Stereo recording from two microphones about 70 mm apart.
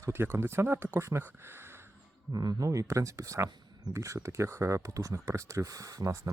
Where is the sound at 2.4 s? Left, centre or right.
Right.